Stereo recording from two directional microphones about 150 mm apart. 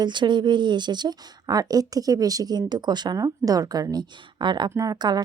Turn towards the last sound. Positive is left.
turn(degrees=-25)  # may be behind; listen again after turning